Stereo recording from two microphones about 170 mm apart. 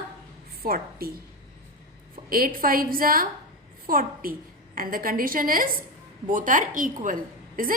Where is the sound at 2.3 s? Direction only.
55° right (ahead or behind).